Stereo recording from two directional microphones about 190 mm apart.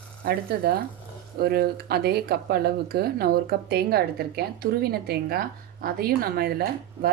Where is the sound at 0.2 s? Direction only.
50° right (ahead or behind).